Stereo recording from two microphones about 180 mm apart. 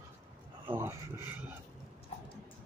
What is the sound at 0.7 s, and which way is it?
Speech, 15° right (ahead or behind).